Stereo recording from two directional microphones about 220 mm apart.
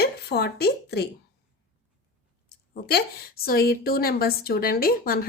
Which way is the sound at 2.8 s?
45° left (ahead or behind).